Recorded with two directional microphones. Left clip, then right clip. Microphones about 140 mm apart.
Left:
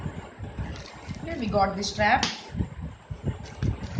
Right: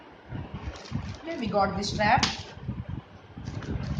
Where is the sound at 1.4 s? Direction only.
15° left (ahead or behind).